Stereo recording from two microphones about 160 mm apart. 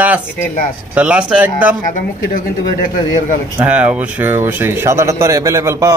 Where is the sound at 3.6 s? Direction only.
10° right (ahead or behind).